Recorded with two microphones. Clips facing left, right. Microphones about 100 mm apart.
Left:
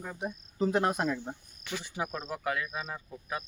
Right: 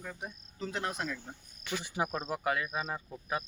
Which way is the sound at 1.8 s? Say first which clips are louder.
Right 3 dB; 15° right (ahead or behind).